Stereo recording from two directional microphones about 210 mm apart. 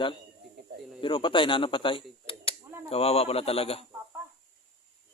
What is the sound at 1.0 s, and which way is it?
A man's voice, 25° left (ahead or behind).